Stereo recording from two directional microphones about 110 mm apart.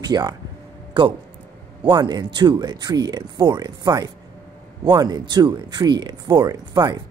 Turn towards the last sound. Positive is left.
turn(degrees=-40)  # may be behind; listen again after turning